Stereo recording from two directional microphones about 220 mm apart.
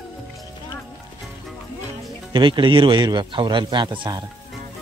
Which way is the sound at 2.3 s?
20° right (ahead or behind).